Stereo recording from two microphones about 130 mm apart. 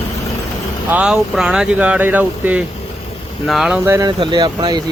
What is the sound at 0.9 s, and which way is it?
Speech, 5° right (ahead or behind).